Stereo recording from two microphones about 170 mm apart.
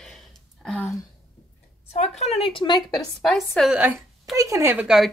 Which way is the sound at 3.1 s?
Centre (ahead or behind).